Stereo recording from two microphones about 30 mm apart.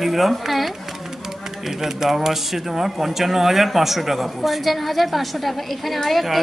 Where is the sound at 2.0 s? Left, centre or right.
Centre.